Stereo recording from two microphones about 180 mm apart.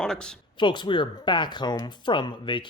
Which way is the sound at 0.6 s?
25° left (ahead or behind).